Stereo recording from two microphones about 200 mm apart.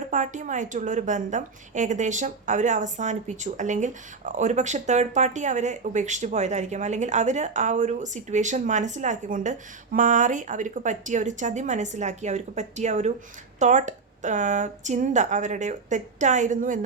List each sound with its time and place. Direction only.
0.1 s a woman's voice: 40° right (ahead or behind)